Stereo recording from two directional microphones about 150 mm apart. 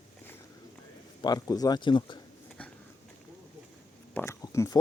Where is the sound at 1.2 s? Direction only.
25° left (ahead or behind).